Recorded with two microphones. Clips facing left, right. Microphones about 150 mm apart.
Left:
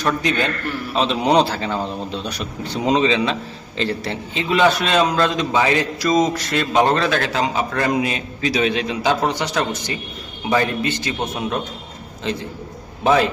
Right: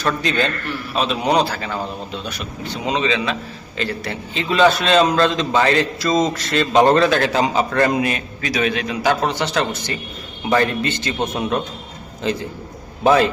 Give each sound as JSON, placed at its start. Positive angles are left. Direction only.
{"t": 0.0, "sound": "a man's voice", "side_deg": 15}
{"t": 2.8, "sound": "a man's voice", "side_deg": 35}
{"t": 6.9, "sound": "a man's voice", "side_deg": 0}
{"t": 8.0, "sound": "a man's voice", "side_deg": 25}
{"t": 9.2, "sound": "a man's voice", "side_deg": 15}
{"t": 12.2, "sound": "a man's voice", "side_deg": 0}